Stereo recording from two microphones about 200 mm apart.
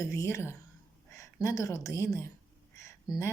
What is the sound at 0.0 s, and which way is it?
A woman's voice, 15° left (ahead or behind).